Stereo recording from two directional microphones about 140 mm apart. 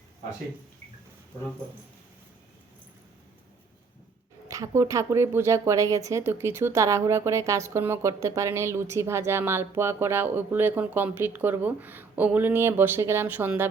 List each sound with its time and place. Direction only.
4.4 s speech: 25° right (ahead or behind)